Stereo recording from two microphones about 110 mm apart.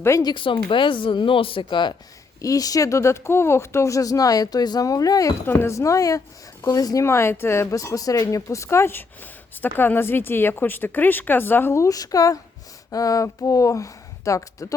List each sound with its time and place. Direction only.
0.2 s speech: 45° left (ahead or behind)
2.4 s speech: 35° left (ahead or behind)
5.5 s speech: 20° left (ahead or behind)